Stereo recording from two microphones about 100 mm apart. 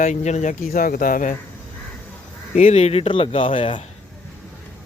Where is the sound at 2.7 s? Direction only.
90° left; by 3.8 s 60° left (ahead or behind).